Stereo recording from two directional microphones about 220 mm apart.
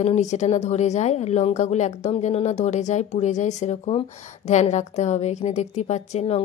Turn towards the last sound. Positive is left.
turn(degrees=30)  # may be behind; listen again after turning